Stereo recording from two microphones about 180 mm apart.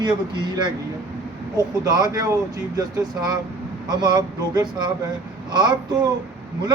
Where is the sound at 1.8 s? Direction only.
20° right (ahead or behind).